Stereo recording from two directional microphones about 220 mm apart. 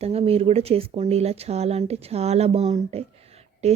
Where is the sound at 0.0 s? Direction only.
25° right (ahead or behind).